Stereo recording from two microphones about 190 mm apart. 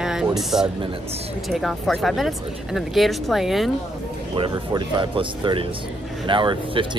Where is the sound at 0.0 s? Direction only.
5° right (ahead or behind).